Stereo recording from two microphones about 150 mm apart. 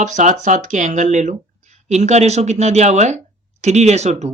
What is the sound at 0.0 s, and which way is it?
Speech, 55° right (ahead or behind).